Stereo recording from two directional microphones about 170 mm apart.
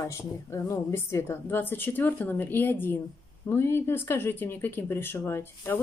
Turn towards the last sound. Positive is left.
turn(degrees=10)  # may be behind; listen again after turning